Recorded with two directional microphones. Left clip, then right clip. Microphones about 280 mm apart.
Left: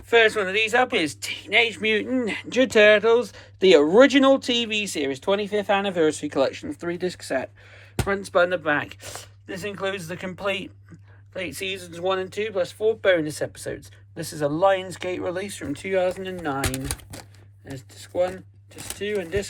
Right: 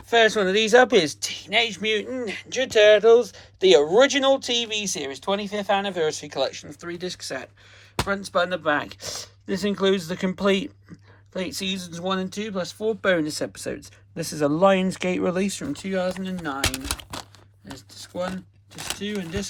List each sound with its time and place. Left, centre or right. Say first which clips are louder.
0.1 s speech: even; centre
17.7 s speech: left 6 dB; centre